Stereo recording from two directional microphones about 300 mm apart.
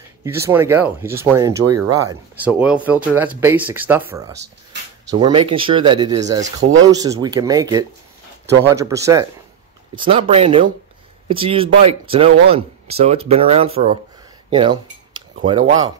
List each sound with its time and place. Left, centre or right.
0.2 s speech: centre
1.7 s speech: right
2.0 s speech: centre